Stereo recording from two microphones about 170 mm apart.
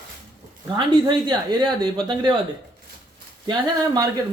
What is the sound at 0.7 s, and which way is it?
A man's voice, 25° right (ahead or behind).